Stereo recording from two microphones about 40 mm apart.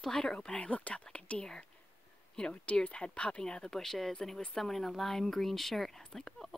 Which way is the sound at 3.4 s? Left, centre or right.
Centre.